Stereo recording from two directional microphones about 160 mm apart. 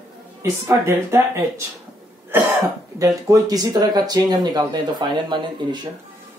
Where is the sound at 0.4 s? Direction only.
15° right (ahead or behind).